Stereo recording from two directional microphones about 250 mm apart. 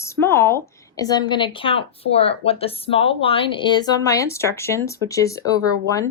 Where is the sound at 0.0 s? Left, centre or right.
Centre.